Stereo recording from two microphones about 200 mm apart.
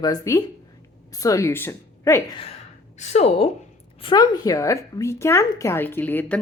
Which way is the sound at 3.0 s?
35° left (ahead or behind).